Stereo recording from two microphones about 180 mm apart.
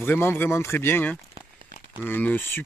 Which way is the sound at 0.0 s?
10° left (ahead or behind).